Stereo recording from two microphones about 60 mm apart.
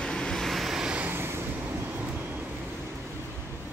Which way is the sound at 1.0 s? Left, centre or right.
Right.